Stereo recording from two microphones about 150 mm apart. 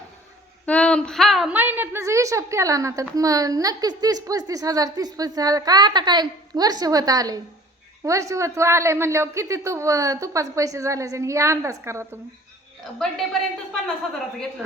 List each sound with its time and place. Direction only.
0.6 s female singing: 10° left (ahead or behind)
1.5 s a woman's voice: 15° right (ahead or behind)
12.8 s a woman's voice: centre (ahead or behind)